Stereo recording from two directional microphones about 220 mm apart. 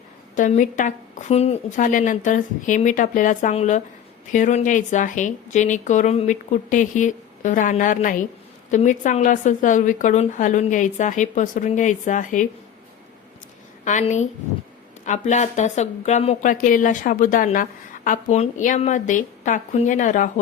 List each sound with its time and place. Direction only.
0.3 s speech: 35° left (ahead or behind)
13.8 s speech: 35° left (ahead or behind)